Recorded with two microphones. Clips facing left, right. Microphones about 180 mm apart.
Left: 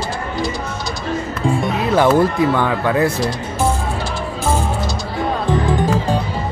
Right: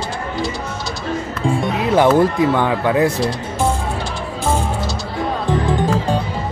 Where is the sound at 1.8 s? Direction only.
15° right (ahead or behind).